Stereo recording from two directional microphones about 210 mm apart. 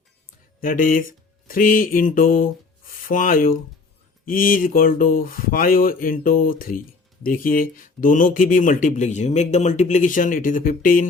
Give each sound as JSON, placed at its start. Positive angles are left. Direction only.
{"t": 0.6, "sound": "speech", "side_deg": 40}